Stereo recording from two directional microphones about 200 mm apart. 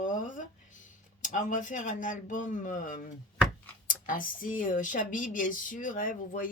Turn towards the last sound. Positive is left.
turn(degrees=45)  # may be behind; listen again after turning